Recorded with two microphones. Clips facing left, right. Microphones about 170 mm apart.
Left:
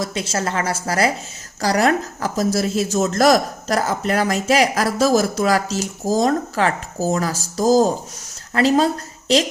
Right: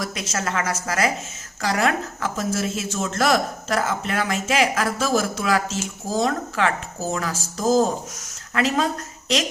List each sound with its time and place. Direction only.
0.0 s a woman's voice: 30° left (ahead or behind)